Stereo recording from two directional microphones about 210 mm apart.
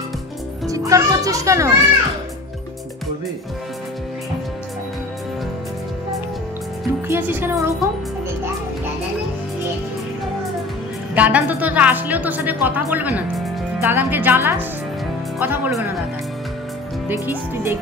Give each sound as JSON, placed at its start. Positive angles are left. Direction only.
{"t": 0.7, "sound": "a woman's voice", "side_deg": -15}
{"t": 7.1, "sound": "a woman's voice", "side_deg": -10}
{"t": 11.1, "sound": "a woman's voice", "side_deg": -5}
{"t": 17.1, "sound": "a woman's voice", "side_deg": -10}